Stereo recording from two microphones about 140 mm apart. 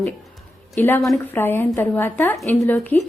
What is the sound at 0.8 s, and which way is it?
Speech, 15° left (ahead or behind).